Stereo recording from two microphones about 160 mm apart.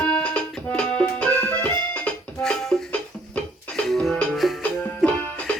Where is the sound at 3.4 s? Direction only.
5° left (ahead or behind).